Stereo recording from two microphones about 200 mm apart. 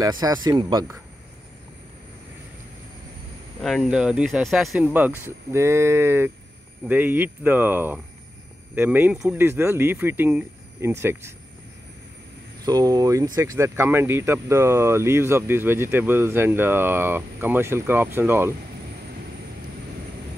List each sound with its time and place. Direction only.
0.0 s speech: 20° right (ahead or behind)
3.6 s speech: centre (ahead or behind)
12.6 s speech: 20° right (ahead or behind)